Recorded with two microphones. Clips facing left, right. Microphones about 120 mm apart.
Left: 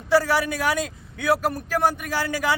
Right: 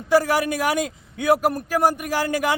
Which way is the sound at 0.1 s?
15° right (ahead or behind).